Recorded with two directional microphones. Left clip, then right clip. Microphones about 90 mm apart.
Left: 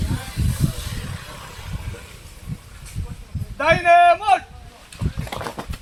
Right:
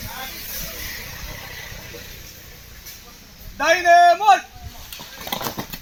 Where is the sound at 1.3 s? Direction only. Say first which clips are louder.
Right 2 dB; 5° right (ahead or behind).